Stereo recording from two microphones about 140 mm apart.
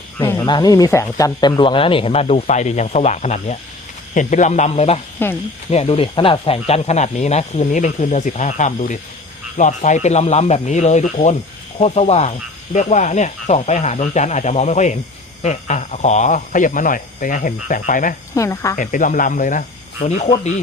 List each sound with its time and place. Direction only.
0.3 s speech: 35° left (ahead or behind); by 4.9 s 50° left (ahead or behind)
5.2 s speech: 15° left (ahead or behind)
5.7 s speech: 45° left (ahead or behind)
12.7 s speech: 60° left (ahead or behind)
18.3 s speech: 20° left (ahead or behind)
18.8 s speech: 70° left (ahead or behind); by 20.2 s 55° left (ahead or behind)